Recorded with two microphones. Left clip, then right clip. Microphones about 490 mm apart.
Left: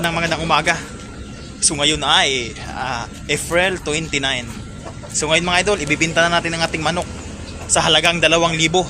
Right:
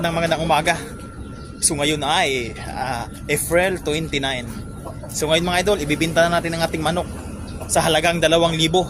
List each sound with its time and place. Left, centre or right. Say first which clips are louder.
0.0 s music: left 1 dB; right
1.6 s speech: left 3 dB; right